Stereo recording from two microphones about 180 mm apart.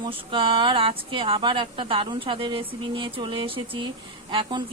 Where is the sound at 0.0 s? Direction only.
30° right (ahead or behind).